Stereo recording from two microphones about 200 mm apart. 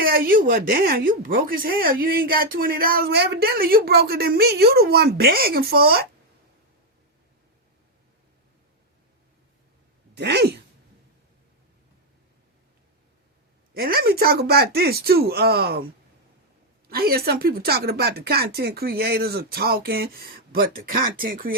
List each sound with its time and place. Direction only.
0.0 s speech: 45° right (ahead or behind)
10.2 s a sound: 60° right (ahead or behind)
13.7 s speech: 50° right (ahead or behind)
16.9 s speech: 50° right (ahead or behind)